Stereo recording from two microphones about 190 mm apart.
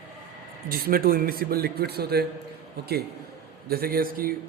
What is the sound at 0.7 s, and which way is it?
A man's voice, 50° right (ahead or behind).